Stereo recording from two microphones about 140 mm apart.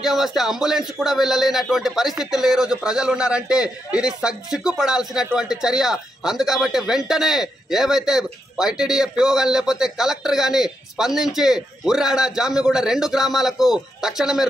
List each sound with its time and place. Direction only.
0.0 s speech: centre (ahead or behind)